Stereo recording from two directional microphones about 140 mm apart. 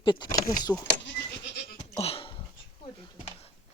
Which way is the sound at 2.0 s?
40° left (ahead or behind).